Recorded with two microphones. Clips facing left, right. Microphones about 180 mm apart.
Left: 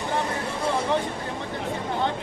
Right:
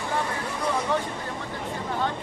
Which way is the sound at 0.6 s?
25° left (ahead or behind).